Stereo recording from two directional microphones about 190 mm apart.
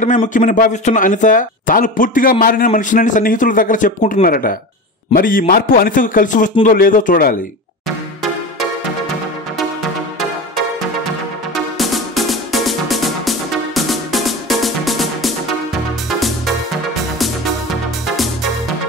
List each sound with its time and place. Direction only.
0.0 s speech: 40° left (ahead or behind)
11.5 s music: centre (ahead or behind)
18.1 s music: centre (ahead or behind)